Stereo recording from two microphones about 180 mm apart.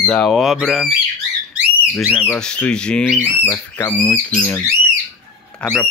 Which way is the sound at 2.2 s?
5° left (ahead or behind).